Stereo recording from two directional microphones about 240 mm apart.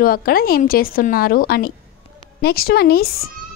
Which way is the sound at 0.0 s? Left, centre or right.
Left.